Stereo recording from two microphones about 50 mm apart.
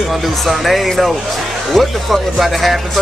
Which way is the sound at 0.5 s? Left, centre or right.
Centre.